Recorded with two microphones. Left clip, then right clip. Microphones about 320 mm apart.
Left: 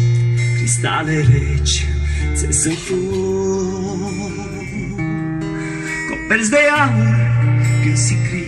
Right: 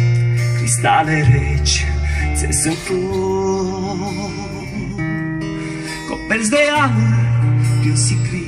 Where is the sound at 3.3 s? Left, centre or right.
Centre.